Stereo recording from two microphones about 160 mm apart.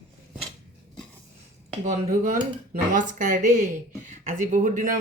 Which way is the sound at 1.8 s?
50° right (ahead or behind).